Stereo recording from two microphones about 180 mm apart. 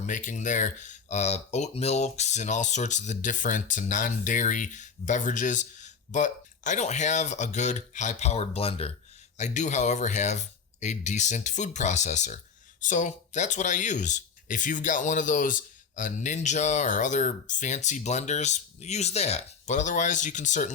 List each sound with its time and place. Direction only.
0.0 s speech: 45° left (ahead or behind)